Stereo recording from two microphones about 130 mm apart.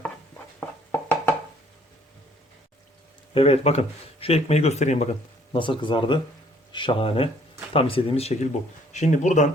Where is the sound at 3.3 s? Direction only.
50° left (ahead or behind).